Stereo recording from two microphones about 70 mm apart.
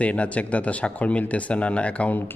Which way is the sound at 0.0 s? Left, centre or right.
Centre.